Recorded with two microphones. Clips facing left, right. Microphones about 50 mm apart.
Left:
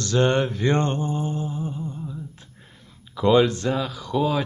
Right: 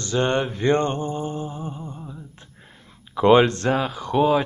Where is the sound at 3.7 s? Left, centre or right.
Right.